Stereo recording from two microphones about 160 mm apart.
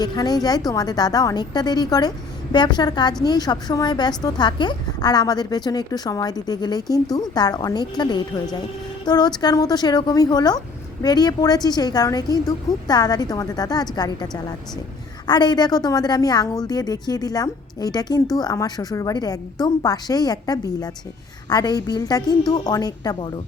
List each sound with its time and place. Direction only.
0.0 s a woman's voice: 25° left (ahead or behind)